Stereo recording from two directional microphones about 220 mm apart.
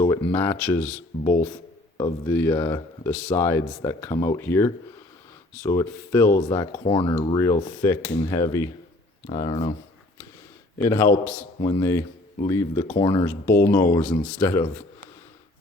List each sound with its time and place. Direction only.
0.0 s speech: 15° left (ahead or behind)
10.8 s speech: 10° left (ahead or behind)